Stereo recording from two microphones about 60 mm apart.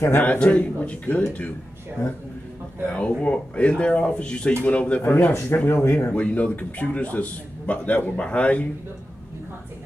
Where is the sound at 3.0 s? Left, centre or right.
Centre.